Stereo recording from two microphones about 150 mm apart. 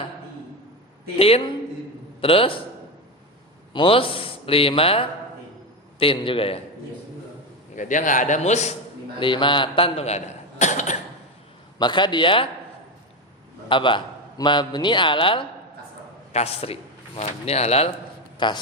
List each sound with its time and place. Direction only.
1.1 s a man's voice: 40° left (ahead or behind)
3.7 s a man's voice: 35° left (ahead or behind)
7.8 s a man's voice: 60° left (ahead or behind)
9.1 s a man's voice: 35° left (ahead or behind); by 10.9 s 55° left (ahead or behind)
11.8 s a man's voice: 30° left (ahead or behind)
13.7 s a man's voice: 35° left (ahead or behind)
18.3 s a man's voice: 30° left (ahead or behind)